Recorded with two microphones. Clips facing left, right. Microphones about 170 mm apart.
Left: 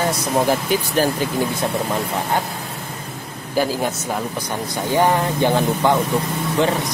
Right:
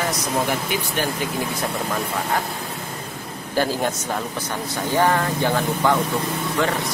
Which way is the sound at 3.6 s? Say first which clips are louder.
Left 2 dB; 10° left (ahead or behind).